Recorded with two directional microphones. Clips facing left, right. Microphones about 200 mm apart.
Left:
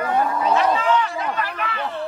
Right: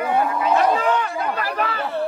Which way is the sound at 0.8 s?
50° right (ahead or behind).